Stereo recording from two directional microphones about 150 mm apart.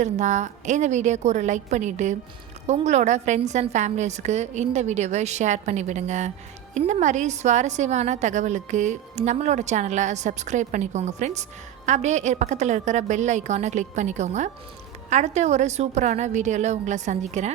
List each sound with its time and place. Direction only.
0.0 s a woman's voice: 50° right (ahead or behind)